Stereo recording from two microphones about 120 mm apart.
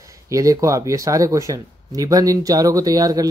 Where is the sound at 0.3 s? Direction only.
25° right (ahead or behind).